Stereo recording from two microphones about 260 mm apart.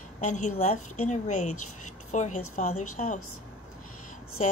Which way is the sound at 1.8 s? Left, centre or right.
Left.